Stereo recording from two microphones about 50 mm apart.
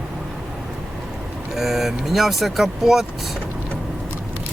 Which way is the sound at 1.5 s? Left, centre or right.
Centre.